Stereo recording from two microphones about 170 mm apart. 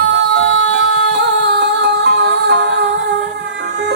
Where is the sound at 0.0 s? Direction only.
90° right.